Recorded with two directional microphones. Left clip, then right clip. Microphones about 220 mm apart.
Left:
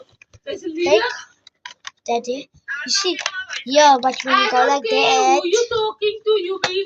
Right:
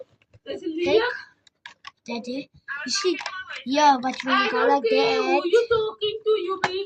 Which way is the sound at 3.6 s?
25° right (ahead or behind).